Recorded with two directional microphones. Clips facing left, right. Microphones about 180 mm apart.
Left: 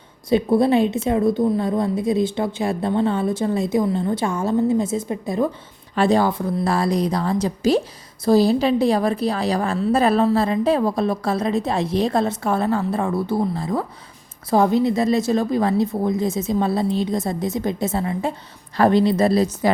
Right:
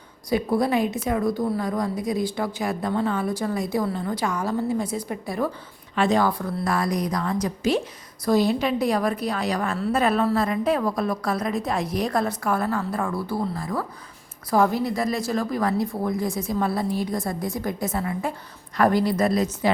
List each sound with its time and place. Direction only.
0.3 s a woman's voice: 25° left (ahead or behind)
5.9 s a woman's voice: 35° left (ahead or behind)